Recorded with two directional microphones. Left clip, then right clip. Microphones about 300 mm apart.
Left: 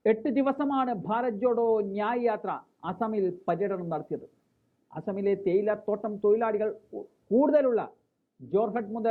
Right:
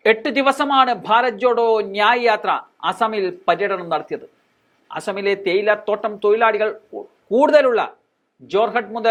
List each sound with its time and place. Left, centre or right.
0.0 s speech: centre
6.9 s speech: right
7.3 s speech: centre